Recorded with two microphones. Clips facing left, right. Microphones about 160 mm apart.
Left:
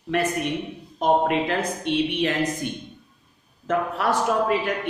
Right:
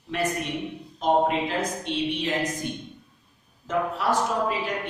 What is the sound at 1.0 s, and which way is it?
Speech, 60° left (ahead or behind).